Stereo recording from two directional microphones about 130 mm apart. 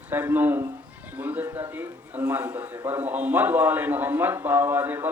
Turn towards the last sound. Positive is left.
turn(degrees=-15)  # may be behind; listen again after turning